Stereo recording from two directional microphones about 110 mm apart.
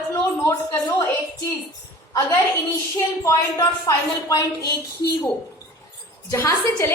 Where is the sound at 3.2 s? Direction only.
30° left (ahead or behind).